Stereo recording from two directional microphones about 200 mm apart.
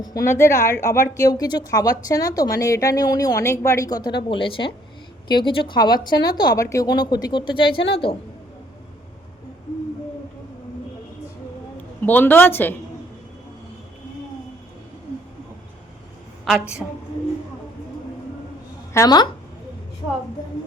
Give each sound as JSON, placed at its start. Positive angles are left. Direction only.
{"t": 0.1, "sound": "a woman's voice", "side_deg": 15}
{"t": 12.0, "sound": "a woman's voice", "side_deg": 10}
{"t": 16.6, "sound": "a woman's voice", "side_deg": -5}
{"t": 18.9, "sound": "a woman's voice", "side_deg": 20}